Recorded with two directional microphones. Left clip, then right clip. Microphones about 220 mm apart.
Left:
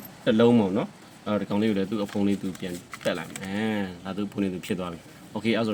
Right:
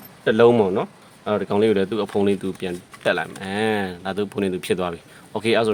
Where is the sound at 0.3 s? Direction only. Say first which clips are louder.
Right 6 dB; 55° right (ahead or behind).